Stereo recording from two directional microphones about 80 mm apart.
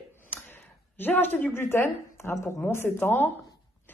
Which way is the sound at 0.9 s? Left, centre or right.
Left.